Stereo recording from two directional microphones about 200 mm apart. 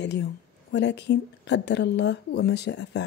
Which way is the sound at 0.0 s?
60° left (ahead or behind).